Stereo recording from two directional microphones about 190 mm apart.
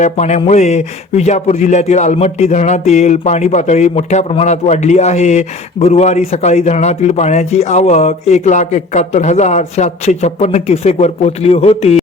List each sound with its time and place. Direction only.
0.0 s speech: 40° left (ahead or behind)